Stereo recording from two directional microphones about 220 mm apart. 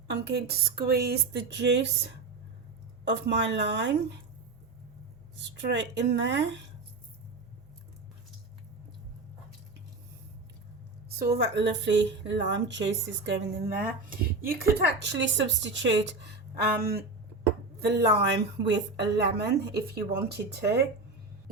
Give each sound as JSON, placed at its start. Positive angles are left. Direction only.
{"t": 0.1, "sound": "speech", "side_deg": -50}
{"t": 5.5, "sound": "a woman's voice", "side_deg": -50}
{"t": 11.2, "sound": "speech", "side_deg": -50}
{"t": 13.2, "sound": "speech", "side_deg": -45}
{"t": 17.7, "sound": "speech", "side_deg": -50}